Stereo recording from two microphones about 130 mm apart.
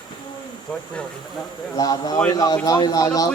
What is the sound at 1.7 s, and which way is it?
A man's voice, 30° left (ahead or behind).